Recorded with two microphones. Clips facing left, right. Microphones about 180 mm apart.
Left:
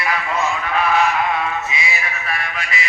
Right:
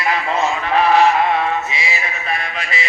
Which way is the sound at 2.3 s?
25° right (ahead or behind).